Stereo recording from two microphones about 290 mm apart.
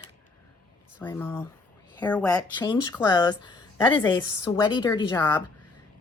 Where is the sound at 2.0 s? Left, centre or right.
Centre.